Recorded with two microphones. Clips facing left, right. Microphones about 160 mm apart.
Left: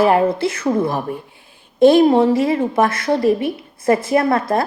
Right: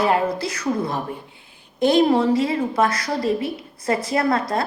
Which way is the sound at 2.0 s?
25° left (ahead or behind).